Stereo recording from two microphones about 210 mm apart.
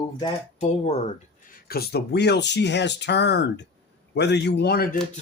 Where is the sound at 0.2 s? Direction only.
30° left (ahead or behind).